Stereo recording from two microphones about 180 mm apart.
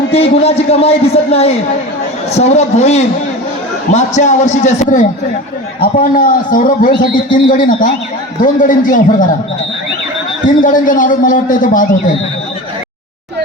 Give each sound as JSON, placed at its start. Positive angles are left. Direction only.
{"t": 0.1, "sound": "a man's voice", "side_deg": 35}
{"t": 10.4, "sound": "a man's voice", "side_deg": 45}